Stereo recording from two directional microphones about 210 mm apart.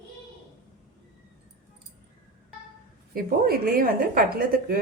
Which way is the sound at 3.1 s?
45° right (ahead or behind).